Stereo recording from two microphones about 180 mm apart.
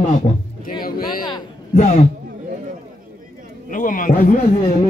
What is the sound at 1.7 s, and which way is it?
Speech, 40° left (ahead or behind).